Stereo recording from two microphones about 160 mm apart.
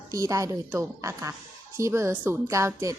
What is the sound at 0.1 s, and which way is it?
A woman's voice, 20° right (ahead or behind).